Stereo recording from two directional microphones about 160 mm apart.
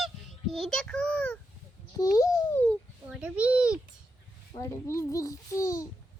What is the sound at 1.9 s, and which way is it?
Speech, 20° left (ahead or behind).